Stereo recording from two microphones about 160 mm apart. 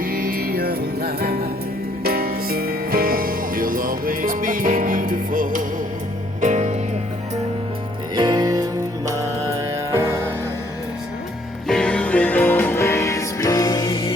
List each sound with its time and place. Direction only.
0.0 s music: 65° right (ahead or behind)
6.4 s music: 50° right (ahead or behind)
8.1 s music: 25° right (ahead or behind)
11.7 s music: 5° left (ahead or behind); by 14.1 s 30° left (ahead or behind)